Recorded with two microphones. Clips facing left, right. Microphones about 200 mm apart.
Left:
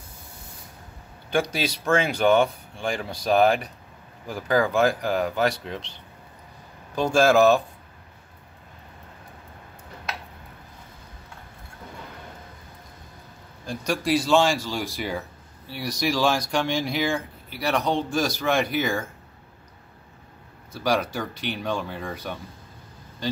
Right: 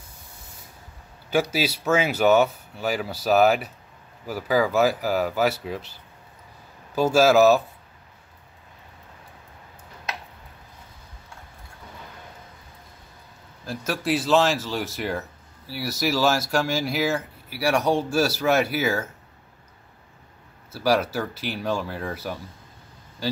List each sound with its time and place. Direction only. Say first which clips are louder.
1.3 s speech: right 2 dB; 5° right (ahead or behind)
7.0 s speech: right 1 dB; 5° right (ahead or behind)
13.7 s speech: left 1 dB; 5° right (ahead or behind)
20.7 s speech: right 2 dB; 5° right (ahead or behind)